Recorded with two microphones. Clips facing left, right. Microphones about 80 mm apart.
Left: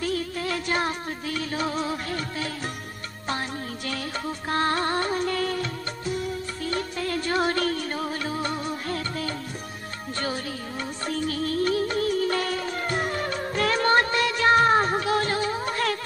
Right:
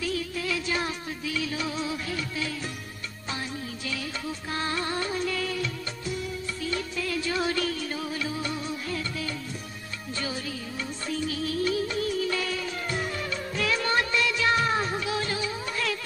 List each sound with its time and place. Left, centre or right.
0.0 s music: left